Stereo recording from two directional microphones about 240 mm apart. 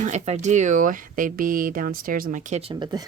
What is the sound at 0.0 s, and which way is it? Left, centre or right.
Speech, right.